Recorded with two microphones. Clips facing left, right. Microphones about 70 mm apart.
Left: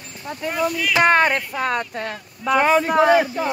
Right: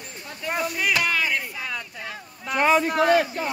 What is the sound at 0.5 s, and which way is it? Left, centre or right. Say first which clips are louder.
Speech: left 3 dB; right.